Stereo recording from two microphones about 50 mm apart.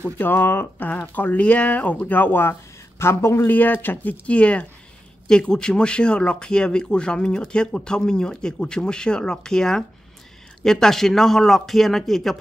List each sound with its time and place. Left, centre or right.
0.2 s speech: left
0.8 s speech: left
3.0 s speech: left
3.4 s a man's voice: left; by 12.4 s centre